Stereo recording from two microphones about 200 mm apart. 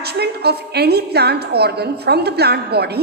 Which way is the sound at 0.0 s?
55° right (ahead or behind).